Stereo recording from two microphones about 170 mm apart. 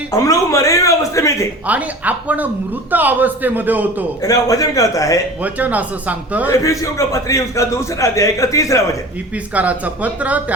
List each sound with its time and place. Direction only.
0.1 s speech: 20° left (ahead or behind)
1.6 s speech: 10° right (ahead or behind)
4.2 s speech: 20° left (ahead or behind)
5.4 s speech: 10° right (ahead or behind)
6.5 s a man's voice: 20° left (ahead or behind)
9.6 s speech: 10° right (ahead or behind)